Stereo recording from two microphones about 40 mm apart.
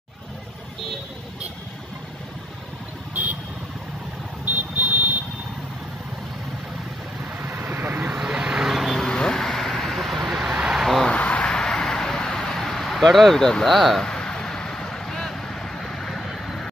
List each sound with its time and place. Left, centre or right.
4.5 s car alarm: right
7.3 s vehicle: right
8.0 s vehicle: right; by 8.9 s centre
9.0 s vehicle: centre
10.4 s vehicle: centre
10.8 s vehicle: centre
11.1 s a sound: left
11.4 s vehicle: centre
13.4 s speech: centre
13.7 s speech: centre
14.0 s vehicle: centre